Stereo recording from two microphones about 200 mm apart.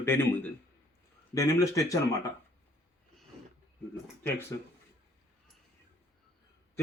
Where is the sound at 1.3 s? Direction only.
15° left (ahead or behind).